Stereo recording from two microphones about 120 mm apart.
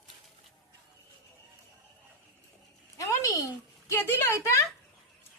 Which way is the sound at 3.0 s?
30° left (ahead or behind).